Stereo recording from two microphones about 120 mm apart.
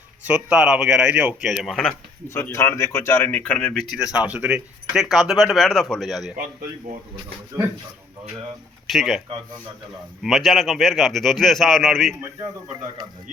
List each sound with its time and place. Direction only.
0.3 s speech: 10° right (ahead or behind)
1.6 s speech: centre (ahead or behind)
2.3 s speech: 20° left (ahead or behind)
3.9 s speech: 10° right (ahead or behind)
8.9 s speech: centre (ahead or behind)
10.2 s speech: centre (ahead or behind)
13.0 s a man's voice: 35° right (ahead or behind)